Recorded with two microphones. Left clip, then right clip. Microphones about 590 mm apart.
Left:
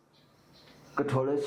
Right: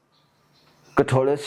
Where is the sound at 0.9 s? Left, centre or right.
Right.